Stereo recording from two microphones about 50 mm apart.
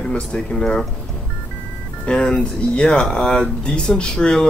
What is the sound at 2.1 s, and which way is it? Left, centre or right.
Speech, centre.